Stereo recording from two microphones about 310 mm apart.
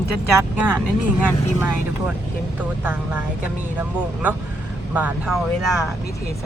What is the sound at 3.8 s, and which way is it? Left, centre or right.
Speech, centre.